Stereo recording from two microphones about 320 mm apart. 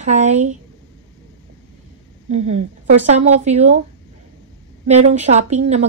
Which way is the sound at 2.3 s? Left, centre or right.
Centre.